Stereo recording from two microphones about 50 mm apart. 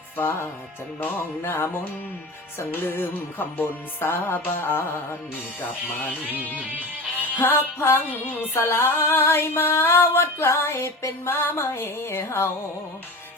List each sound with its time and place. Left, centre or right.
0.2 s female singing: left
0.9 s music: left
1.4 s female singing: left
2.7 s female singing: left
4.0 s music: left
6.6 s music: right
7.3 s female singing: left